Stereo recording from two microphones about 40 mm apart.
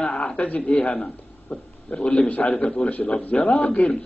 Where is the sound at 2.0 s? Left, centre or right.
Left.